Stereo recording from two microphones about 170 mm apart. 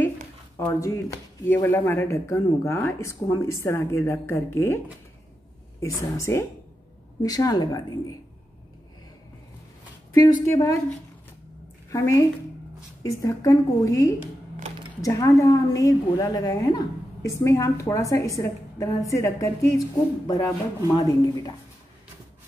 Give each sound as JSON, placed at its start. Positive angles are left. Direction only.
{"t": 0.6, "sound": "speech", "side_deg": 15}
{"t": 5.8, "sound": "a woman's voice", "side_deg": 20}
{"t": 10.1, "sound": "speech", "side_deg": 15}
{"t": 11.9, "sound": "a woman's voice", "side_deg": 15}